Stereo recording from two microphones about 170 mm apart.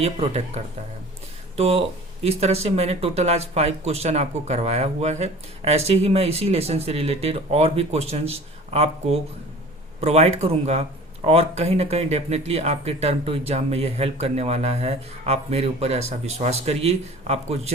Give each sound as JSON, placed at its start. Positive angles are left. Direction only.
{"t": 0.0, "sound": "speech", "side_deg": -40}